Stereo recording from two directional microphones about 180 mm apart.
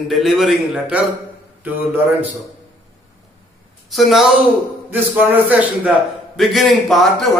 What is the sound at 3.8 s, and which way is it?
A woman's voice, centre (ahead or behind).